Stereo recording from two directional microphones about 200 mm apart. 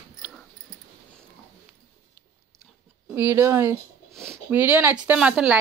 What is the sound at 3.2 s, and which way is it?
Speech, 10° right (ahead or behind).